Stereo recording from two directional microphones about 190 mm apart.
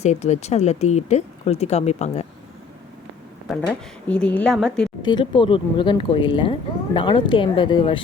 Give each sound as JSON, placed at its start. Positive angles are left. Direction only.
{"t": 0.0, "sound": "speech", "side_deg": 35}
{"t": 3.5, "sound": "speech", "side_deg": 5}
{"t": 5.0, "sound": "speech", "side_deg": 25}